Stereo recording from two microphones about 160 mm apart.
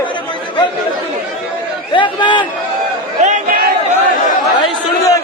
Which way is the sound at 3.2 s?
60° right (ahead or behind).